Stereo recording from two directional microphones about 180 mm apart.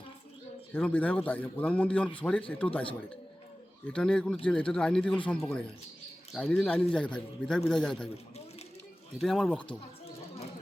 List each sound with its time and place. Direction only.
0.7 s a man's voice: 10° left (ahead or behind)
3.9 s a man's voice: 5° left (ahead or behind)
9.2 s a man's voice: centre (ahead or behind)